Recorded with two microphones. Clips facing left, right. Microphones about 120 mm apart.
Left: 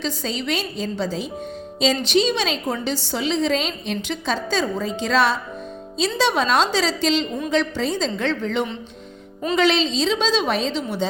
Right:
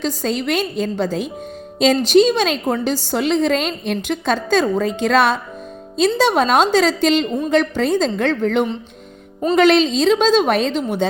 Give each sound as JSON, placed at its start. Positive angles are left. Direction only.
{"t": 0.0, "sound": "a woman's voice", "side_deg": -50}